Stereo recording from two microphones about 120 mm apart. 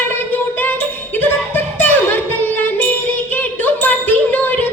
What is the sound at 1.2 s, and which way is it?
Music, 15° left (ahead or behind).